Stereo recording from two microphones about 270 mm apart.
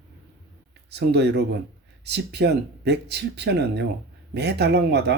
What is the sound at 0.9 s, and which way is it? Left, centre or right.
Speech, right.